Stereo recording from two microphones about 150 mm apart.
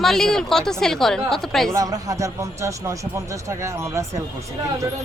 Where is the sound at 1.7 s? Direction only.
25° right (ahead or behind).